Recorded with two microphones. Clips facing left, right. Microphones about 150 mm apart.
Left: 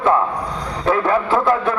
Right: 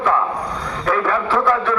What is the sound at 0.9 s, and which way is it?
Speech, 25° left (ahead or behind).